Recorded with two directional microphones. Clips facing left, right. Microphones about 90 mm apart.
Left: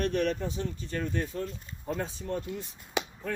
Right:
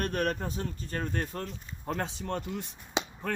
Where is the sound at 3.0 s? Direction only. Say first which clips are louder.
Even; 20° right (ahead or behind).